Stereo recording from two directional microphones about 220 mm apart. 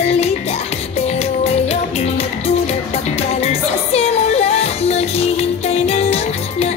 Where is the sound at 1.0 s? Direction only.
30° left (ahead or behind).